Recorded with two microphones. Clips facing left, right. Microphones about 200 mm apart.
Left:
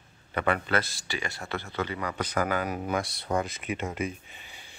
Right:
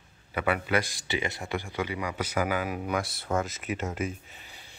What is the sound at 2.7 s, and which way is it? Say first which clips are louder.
Speech: left 1 dB; 35° left (ahead or behind).